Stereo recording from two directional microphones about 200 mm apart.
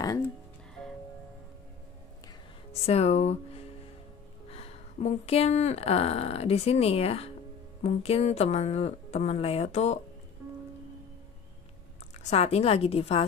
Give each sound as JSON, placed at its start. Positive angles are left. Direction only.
{"t": 2.7, "sound": "speech", "side_deg": 30}
{"t": 12.2, "sound": "speech", "side_deg": 30}